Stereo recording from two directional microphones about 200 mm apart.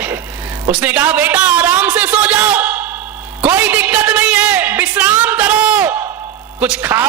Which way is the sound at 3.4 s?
10° right (ahead or behind).